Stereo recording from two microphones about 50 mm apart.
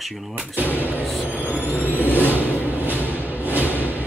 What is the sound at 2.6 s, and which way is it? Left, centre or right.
Music, right.